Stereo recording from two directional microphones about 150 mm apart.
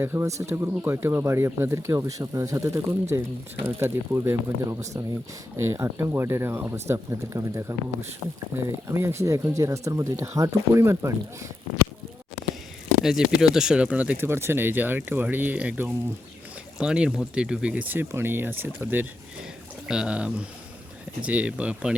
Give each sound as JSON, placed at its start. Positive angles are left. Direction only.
{"t": 0.0, "sound": "speech", "side_deg": -15}
{"t": 13.0, "sound": "speech", "side_deg": -5}